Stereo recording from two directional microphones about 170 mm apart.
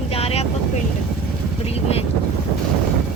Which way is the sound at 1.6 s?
35° left (ahead or behind).